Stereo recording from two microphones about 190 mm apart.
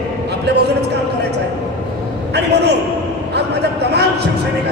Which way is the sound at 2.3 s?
60° right (ahead or behind).